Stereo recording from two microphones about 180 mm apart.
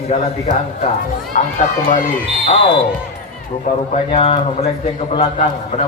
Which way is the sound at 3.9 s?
35° left (ahead or behind).